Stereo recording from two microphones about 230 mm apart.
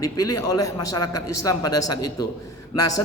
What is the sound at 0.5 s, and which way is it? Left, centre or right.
A man's voice, left.